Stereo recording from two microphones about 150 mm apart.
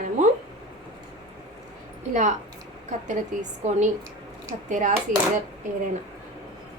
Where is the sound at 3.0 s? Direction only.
55° right (ahead or behind).